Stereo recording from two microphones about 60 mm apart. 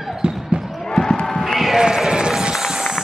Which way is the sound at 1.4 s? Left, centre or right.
Centre.